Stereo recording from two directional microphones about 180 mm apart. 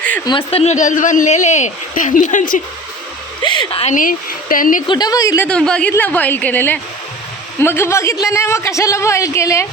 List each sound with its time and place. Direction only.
0.3 s speech: 30° left (ahead or behind); by 2.6 s 45° left (ahead or behind)
3.4 s a woman's voice: 25° left (ahead or behind)
3.9 s speech: 50° left (ahead or behind)
4.9 s a woman's voice: 20° left (ahead or behind)
5.5 s a woman's voice: 5° left (ahead or behind)